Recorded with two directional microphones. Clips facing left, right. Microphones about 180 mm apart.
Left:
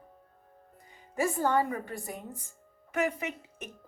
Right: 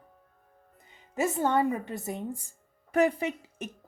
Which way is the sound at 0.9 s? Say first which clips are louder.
Right 1 dB; 20° right (ahead or behind).